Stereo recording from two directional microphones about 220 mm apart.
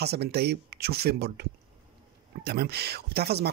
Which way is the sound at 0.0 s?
45° right (ahead or behind).